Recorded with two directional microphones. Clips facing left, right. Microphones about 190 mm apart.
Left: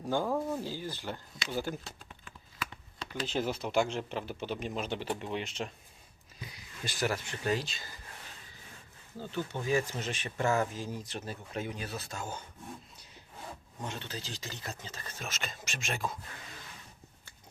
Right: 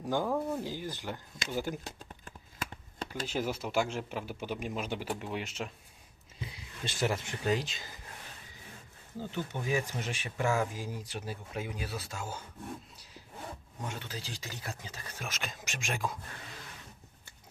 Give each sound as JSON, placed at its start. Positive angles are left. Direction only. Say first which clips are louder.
{"t": 0.0, "sound": "speech", "louder": "even", "side_deg": -15}
{"t": 0.3, "sound": "speech", "louder": "even", "side_deg": 0}
{"t": 0.6, "sound": "speech", "louder": "even", "side_deg": -15}
{"t": 2.0, "sound": "shuffling cards", "louder": "right 3 dB", "side_deg": -45}
{"t": 3.1, "sound": "speech", "louder": "left 1 dB", "side_deg": -10}
{"t": 6.4, "sound": "speech", "louder": "right 2 dB", "side_deg": -25}
{"t": 9.1, "sound": "speech", "louder": "left 1 dB", "side_deg": -15}
{"t": 13.8, "sound": "speech", "louder": "left 1 dB", "side_deg": -10}